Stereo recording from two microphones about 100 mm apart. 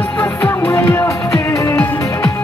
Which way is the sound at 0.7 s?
30° left (ahead or behind).